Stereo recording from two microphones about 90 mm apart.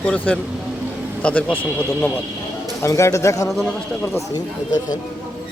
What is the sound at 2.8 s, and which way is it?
Speech, 35° left (ahead or behind).